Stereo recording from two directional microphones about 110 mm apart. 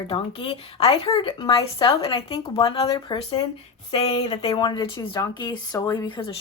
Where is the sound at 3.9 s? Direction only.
70° left (ahead or behind); by 5.2 s 50° left (ahead or behind).